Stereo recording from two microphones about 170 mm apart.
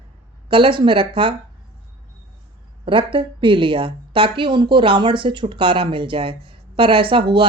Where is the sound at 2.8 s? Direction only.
30° right (ahead or behind).